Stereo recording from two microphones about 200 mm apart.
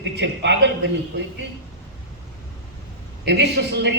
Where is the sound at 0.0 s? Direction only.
60° right (ahead or behind).